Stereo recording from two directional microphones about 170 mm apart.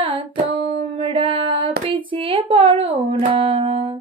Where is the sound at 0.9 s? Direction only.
30° right (ahead or behind).